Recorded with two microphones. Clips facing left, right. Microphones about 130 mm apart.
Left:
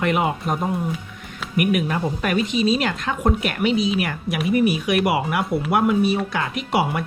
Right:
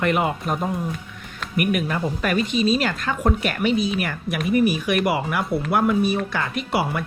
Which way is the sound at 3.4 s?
5° left (ahead or behind).